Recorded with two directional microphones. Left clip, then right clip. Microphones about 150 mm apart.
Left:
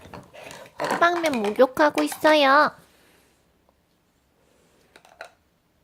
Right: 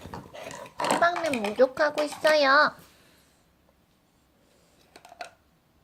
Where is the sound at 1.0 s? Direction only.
55° left (ahead or behind); by 3.1 s 35° left (ahead or behind).